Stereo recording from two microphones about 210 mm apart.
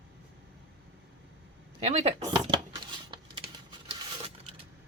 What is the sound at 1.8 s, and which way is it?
Speech, 30° right (ahead or behind).